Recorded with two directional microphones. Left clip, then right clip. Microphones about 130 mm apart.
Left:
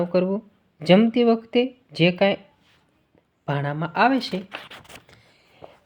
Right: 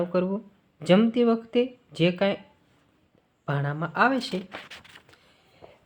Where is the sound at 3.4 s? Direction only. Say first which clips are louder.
Left 3 dB; 45° left (ahead or behind).